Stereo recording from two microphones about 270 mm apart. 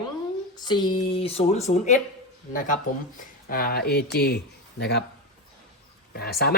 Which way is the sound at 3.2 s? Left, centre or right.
Left.